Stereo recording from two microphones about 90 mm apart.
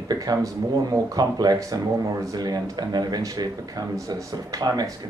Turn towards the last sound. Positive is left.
turn(degrees=-45)  # may be behind; listen again after turning